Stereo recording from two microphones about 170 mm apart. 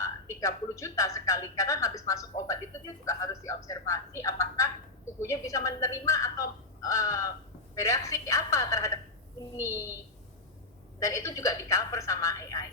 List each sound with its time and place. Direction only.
0.0 s a woman's voice: 20° left (ahead or behind)
11.0 s a woman's voice: 20° left (ahead or behind)